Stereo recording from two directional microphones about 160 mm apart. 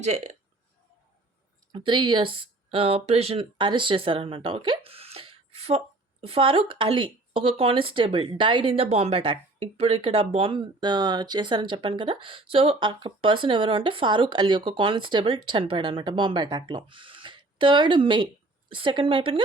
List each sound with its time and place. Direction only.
0.0 s speech: 45° right (ahead or behind)
1.7 s speech: 30° right (ahead or behind)